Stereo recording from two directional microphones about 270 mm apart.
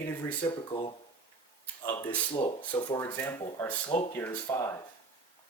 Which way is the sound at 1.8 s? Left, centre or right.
Centre.